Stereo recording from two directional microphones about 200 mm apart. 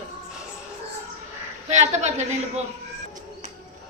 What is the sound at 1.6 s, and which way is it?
Speech, 35° right (ahead or behind).